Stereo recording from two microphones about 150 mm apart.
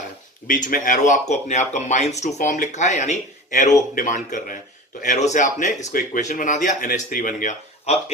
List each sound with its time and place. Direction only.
0.4 s a man's voice: 65° left (ahead or behind)